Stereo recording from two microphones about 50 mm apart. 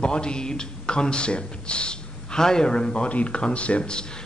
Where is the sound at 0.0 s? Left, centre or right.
Centre.